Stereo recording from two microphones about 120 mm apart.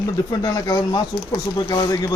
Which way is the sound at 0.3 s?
30° left (ahead or behind).